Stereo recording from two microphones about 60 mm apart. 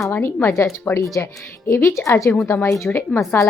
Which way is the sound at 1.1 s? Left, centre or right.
Left.